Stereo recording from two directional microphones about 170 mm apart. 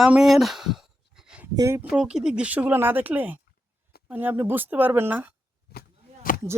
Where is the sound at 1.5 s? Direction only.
15° right (ahead or behind).